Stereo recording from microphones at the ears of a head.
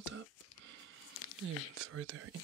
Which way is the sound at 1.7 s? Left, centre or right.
Right.